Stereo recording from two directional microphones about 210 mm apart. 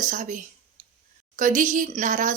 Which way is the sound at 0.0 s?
40° right (ahead or behind).